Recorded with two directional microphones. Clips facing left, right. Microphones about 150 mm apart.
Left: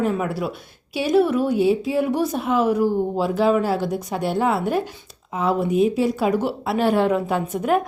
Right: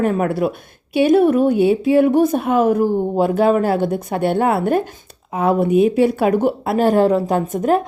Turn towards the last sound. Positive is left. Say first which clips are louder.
# right 5 dB
turn(degrees=-45)  # may be behind; listen again after turning